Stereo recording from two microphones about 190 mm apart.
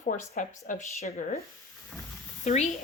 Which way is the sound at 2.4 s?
35° left (ahead or behind).